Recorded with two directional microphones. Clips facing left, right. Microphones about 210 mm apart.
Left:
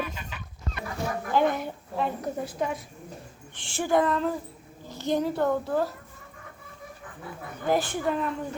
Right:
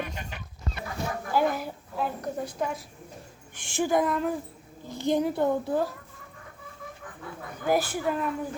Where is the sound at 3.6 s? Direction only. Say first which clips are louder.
Left 1 dB; 10° right (ahead or behind).